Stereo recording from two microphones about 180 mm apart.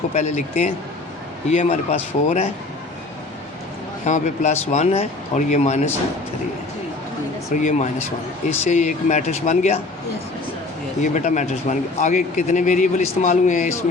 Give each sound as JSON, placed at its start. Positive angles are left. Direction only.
{"t": 0.1, "sound": "speech", "side_deg": 40}
{"t": 4.0, "sound": "speech", "side_deg": 40}
{"t": 7.5, "sound": "a man's voice", "side_deg": 40}
{"t": 11.0, "sound": "a man's voice", "side_deg": 45}